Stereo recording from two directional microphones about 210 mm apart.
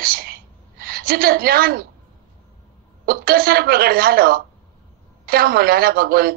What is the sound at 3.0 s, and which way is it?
A woman's voice, 45° right (ahead or behind).